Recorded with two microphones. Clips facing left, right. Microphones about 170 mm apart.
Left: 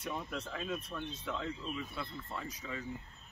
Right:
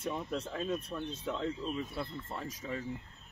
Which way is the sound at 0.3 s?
35° right (ahead or behind).